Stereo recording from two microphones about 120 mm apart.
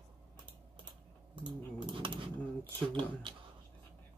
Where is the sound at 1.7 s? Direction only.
45° right (ahead or behind).